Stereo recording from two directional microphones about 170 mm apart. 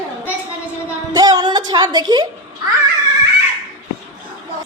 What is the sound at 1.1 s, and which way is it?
Music, 20° right (ahead or behind).